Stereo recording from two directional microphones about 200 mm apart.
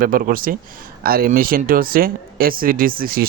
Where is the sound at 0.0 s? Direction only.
45° right (ahead or behind).